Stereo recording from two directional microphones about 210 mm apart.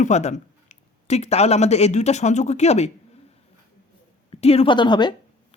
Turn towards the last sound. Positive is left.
turn(degrees=20)  # may be behind; listen again after turning